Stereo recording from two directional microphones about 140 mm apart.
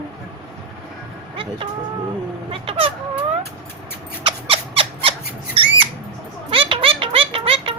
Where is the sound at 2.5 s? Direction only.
40° right (ahead or behind).